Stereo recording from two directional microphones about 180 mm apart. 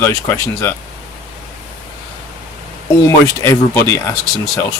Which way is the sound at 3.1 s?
15° left (ahead or behind).